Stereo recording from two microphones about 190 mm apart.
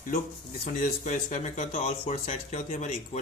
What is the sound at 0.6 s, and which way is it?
Speech, 45° left (ahead or behind).